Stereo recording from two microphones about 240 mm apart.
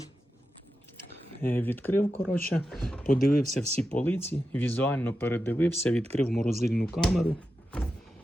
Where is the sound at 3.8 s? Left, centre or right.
Centre.